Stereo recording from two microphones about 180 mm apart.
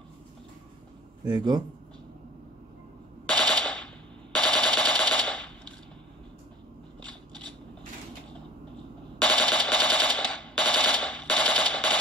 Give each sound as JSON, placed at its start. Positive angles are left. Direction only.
{"t": 1.2, "sound": "a man's voice", "side_deg": -20}
{"t": 3.3, "sound": "machine gun", "side_deg": 5}
{"t": 9.2, "sound": "machine gun", "side_deg": 5}